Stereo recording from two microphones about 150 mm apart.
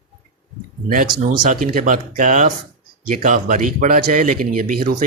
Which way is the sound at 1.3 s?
60° right (ahead or behind).